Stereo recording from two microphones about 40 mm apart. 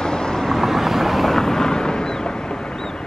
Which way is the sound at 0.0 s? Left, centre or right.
Centre.